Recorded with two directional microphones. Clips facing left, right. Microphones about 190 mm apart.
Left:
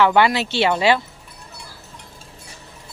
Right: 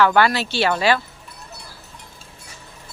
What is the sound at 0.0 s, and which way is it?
Speech, 20° left (ahead or behind).